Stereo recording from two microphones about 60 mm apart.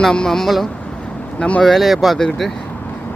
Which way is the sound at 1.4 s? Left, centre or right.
Centre.